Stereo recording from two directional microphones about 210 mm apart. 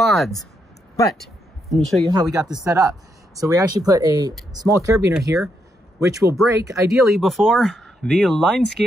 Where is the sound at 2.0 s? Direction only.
15° right (ahead or behind).